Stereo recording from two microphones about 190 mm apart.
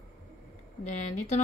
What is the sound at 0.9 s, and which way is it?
Speech, 35° left (ahead or behind).